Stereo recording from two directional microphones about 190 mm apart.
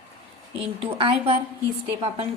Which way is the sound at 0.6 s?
30° right (ahead or behind).